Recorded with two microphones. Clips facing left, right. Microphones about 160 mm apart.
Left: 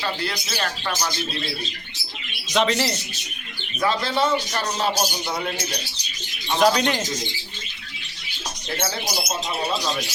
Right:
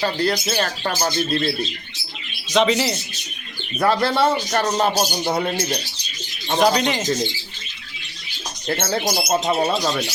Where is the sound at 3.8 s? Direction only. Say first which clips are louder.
Right 4 dB; 60° right (ahead or behind).